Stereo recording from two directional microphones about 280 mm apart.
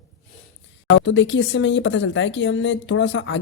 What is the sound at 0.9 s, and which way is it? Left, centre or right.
Speech, left.